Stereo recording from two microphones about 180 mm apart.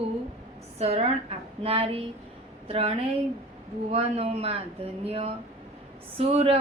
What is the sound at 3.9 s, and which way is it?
A woman's voice, 35° right (ahead or behind).